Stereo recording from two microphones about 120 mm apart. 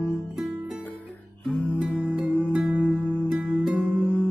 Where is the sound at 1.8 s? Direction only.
10° right (ahead or behind).